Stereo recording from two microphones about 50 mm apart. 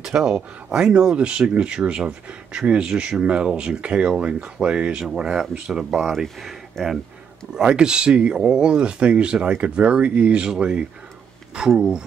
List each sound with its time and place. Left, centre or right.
0.0 s speech: centre
5.9 s speech: centre
7.5 s speech: centre